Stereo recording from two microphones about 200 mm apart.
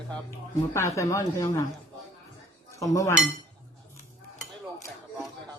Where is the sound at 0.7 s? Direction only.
15° left (ahead or behind).